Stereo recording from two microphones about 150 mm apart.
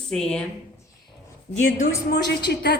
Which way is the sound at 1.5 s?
55° left (ahead or behind).